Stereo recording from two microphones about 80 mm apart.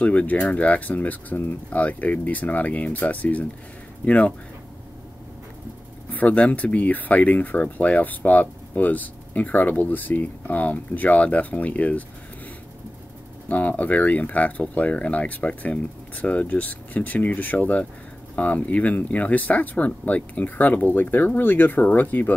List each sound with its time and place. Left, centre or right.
0.0 s speech: centre
6.1 s speech: centre
13.5 s speech: centre